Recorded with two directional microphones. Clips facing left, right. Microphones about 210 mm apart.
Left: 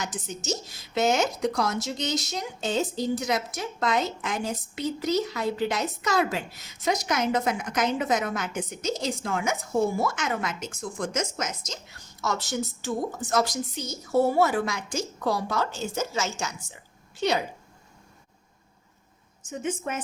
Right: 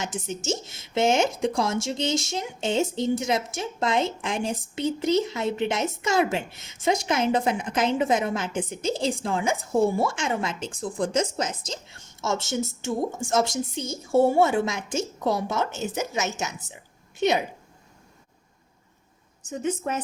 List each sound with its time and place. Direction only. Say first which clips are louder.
0.0 s a woman's voice: right 3 dB; 25° right (ahead or behind)
19.5 s a woman's voice: right 3 dB; 40° right (ahead or behind)